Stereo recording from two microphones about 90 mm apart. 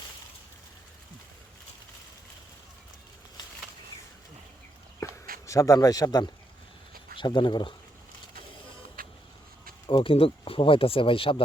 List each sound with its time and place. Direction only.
5.0 s a sound: 40° left (ahead or behind)
5.5 s speech: 40° left (ahead or behind)
7.2 s speech: 65° left (ahead or behind)
9.9 s speech: 85° left